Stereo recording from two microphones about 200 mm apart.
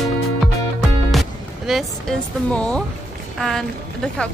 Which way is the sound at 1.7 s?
Centre (ahead or behind).